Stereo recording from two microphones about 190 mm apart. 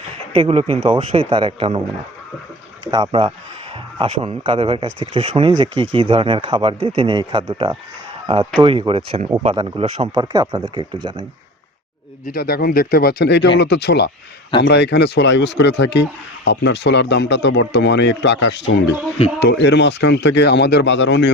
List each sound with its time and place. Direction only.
0.3 s speech: 30° right (ahead or behind)
2.8 s speech: 25° right (ahead or behind)
12.2 s speech: 55° left (ahead or behind); by 21.2 s 75° left (ahead or behind)